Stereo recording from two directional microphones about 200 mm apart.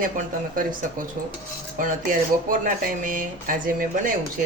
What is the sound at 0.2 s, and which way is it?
Speech, 45° right (ahead or behind).